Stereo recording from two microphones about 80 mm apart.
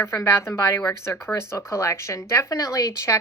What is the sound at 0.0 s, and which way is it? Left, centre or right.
Speech, left.